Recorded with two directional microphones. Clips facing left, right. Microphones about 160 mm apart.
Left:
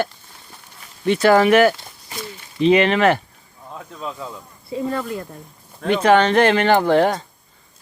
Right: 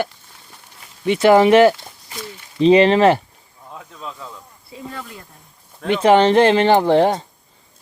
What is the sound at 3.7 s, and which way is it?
Speech, 5° left (ahead or behind).